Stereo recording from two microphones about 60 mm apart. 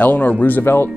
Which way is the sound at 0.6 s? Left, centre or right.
Left.